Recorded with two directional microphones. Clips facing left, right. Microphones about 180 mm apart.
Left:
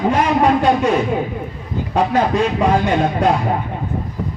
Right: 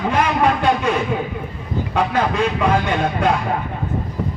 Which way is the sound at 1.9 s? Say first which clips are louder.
Left 4 dB; 40° left (ahead or behind).